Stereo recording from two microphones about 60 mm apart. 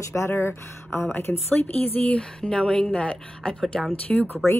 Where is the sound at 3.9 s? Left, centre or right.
Left.